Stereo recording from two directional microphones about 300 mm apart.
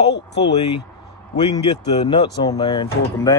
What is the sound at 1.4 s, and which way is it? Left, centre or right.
Speech, centre.